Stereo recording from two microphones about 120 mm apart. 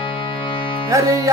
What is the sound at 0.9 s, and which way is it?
Music, 25° right (ahead or behind).